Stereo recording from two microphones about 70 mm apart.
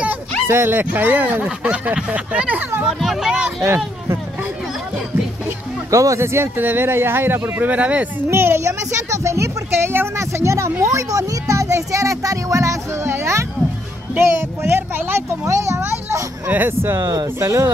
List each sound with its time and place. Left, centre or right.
0.5 s speech: right
2.9 s speech: centre
3.6 s speech: right
5.9 s speech: right
8.3 s speech: right
15.4 s speech: right
16.5 s speech: right
17.0 s speech: right
17.4 s speech: right